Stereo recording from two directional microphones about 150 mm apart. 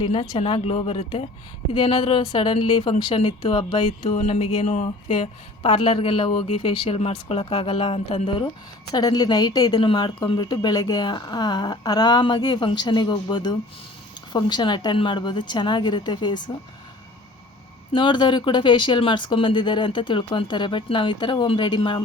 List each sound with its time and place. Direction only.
0.0 s speech: 35° left (ahead or behind)
4.1 s speech: 50° left (ahead or behind)
5.1 s speech: 40° left (ahead or behind)
8.9 s a woman's voice: 25° left (ahead or behind)
17.9 s speech: 30° left (ahead or behind)